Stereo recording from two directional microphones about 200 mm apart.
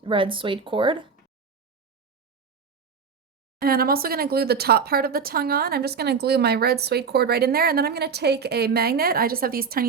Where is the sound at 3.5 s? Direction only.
50° right (ahead or behind).